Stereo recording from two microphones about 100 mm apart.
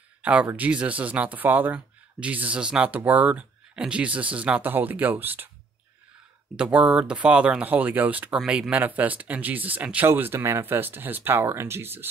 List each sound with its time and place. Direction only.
0.2 s speech: 10° right (ahead or behind)
6.5 s speech: 10° right (ahead or behind)